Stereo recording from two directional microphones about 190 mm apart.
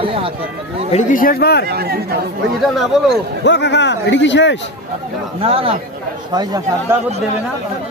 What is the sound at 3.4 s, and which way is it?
A man's voice, 65° left (ahead or behind).